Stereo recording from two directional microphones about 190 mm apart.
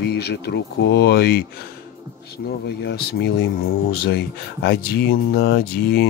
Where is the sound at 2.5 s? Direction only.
60° left (ahead or behind).